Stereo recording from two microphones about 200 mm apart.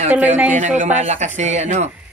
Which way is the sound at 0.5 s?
35° right (ahead or behind).